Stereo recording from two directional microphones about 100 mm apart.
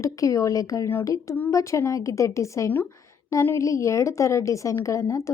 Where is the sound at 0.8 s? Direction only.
20° left (ahead or behind).